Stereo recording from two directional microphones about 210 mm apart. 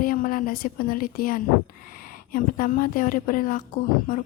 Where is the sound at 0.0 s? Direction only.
40° left (ahead or behind).